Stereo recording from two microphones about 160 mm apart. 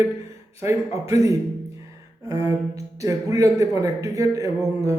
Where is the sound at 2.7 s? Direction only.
20° right (ahead or behind).